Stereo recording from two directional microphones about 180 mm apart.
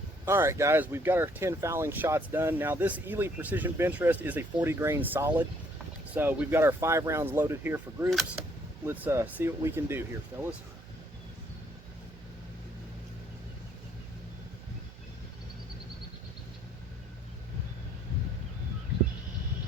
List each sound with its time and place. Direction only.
0.3 s speech: 15° right (ahead or behind)